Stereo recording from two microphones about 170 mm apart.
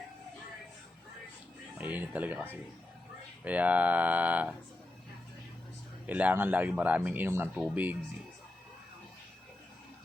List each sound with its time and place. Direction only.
1.8 s speech: 10° right (ahead or behind)
6.1 s speech: 10° right (ahead or behind)